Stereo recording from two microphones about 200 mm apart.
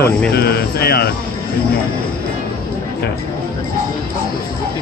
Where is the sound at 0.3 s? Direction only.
50° left (ahead or behind).